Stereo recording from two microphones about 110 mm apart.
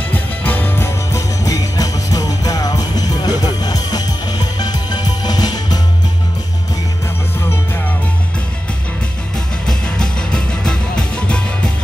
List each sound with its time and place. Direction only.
0.1 s music: 15° left (ahead or behind); by 5.8 s 35° left (ahead or behind)
9.7 s music: 5° left (ahead or behind)